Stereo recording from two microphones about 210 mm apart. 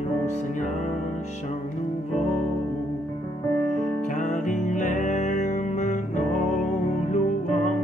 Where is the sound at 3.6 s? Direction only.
35° left (ahead or behind).